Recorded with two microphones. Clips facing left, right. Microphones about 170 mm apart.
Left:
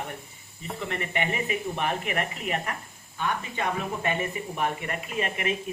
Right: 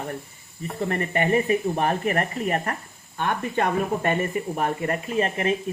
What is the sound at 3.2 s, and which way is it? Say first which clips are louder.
Speech: right 5 dB; 55° right (ahead or behind).